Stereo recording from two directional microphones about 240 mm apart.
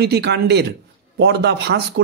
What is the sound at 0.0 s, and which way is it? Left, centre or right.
Speech, right.